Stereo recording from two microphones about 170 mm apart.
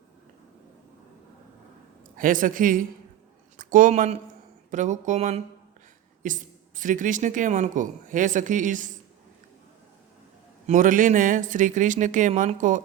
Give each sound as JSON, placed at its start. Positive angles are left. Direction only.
{"t": 2.1, "sound": "speech", "side_deg": -55}
{"t": 10.7, "sound": "speech", "side_deg": -50}